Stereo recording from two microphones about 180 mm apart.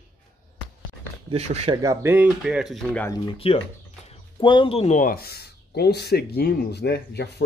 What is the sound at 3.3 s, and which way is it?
Speech, 30° left (ahead or behind).